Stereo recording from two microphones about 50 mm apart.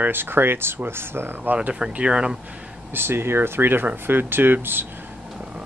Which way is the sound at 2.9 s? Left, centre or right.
Right.